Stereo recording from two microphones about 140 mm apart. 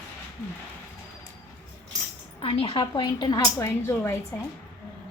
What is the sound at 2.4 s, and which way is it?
A woman's voice, 45° left (ahead or behind).